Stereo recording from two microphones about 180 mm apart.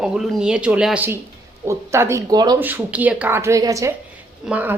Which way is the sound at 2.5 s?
10° right (ahead or behind).